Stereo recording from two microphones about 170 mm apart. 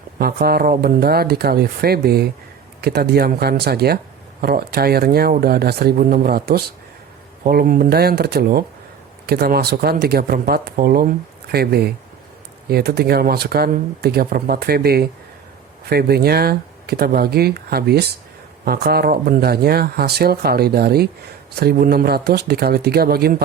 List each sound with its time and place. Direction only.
0.2 s speech: 65° right (ahead or behind)
11.5 s speech: 70° right (ahead or behind)